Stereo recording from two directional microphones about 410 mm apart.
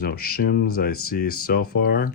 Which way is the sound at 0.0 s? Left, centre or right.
Left.